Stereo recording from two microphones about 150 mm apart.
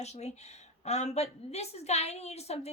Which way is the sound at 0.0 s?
45° left (ahead or behind).